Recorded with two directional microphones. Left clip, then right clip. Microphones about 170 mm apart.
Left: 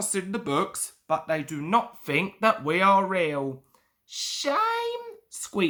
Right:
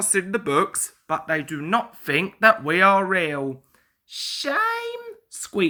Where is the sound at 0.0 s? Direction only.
15° right (ahead or behind).